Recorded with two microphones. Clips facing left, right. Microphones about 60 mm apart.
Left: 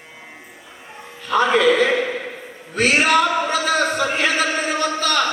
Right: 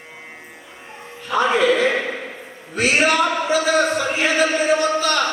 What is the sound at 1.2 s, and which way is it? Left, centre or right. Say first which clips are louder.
Music: left 1 dB; left.